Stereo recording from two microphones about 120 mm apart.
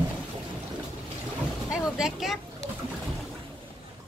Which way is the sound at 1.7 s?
5° right (ahead or behind).